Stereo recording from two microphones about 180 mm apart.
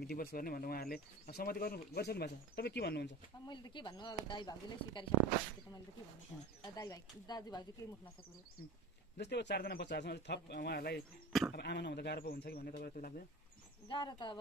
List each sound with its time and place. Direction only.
0.0 s speech: 60° left (ahead or behind)
3.4 s speech: 25° left (ahead or behind)
6.6 s speech: 20° left (ahead or behind)
9.2 s speech: 70° left (ahead or behind); by 13.1 s 50° left (ahead or behind)
13.8 s speech: 25° left (ahead or behind)